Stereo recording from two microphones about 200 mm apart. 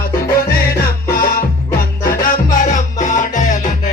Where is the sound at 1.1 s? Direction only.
45° left (ahead or behind).